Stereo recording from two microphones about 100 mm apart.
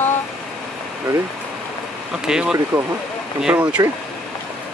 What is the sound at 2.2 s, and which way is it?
Speech, 10° right (ahead or behind).